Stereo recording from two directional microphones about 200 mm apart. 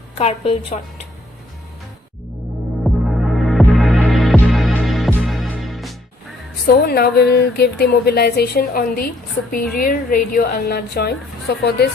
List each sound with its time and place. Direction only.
0.2 s a woman's voice: 30° left (ahead or behind)
2.9 s music: centre (ahead or behind)
6.7 s a woman's voice: 50° left (ahead or behind)